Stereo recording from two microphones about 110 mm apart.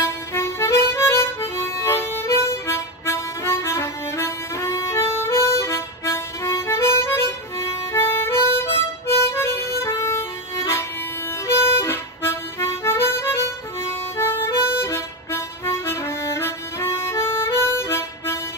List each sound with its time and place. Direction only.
0.0 s harmonica: 25° left (ahead or behind)
11.4 s harmonica: 20° left (ahead or behind)